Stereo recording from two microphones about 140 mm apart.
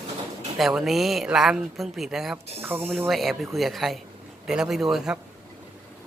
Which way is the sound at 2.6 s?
15° right (ahead or behind).